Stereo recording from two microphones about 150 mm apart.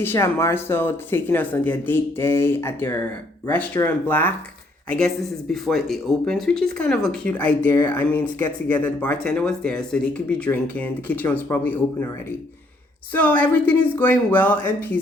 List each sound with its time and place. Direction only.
0.0 s speech: 15° left (ahead or behind)
13.1 s speech: 10° left (ahead or behind)